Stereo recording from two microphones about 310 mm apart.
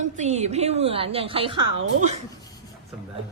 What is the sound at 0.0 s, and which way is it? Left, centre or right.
A woman's voice, right.